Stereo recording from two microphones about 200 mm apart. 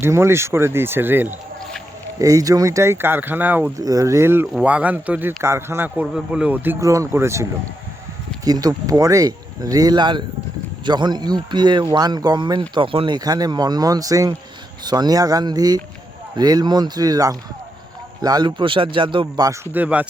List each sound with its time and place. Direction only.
0.0 s a man's voice: 10° right (ahead or behind)
8.4 s speech: 20° right (ahead or behind)
19.7 s a man's voice: 5° right (ahead or behind)